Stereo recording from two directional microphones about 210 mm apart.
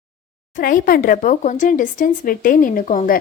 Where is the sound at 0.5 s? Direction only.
40° left (ahead or behind).